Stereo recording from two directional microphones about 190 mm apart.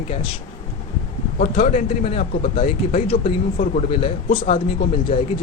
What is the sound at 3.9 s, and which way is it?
Speech, 30° left (ahead or behind).